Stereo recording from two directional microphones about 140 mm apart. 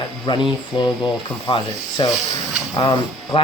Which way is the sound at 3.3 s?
40° left (ahead or behind).